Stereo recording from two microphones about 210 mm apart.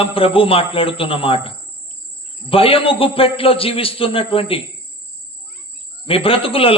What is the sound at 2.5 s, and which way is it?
A man's voice, 25° left (ahead or behind).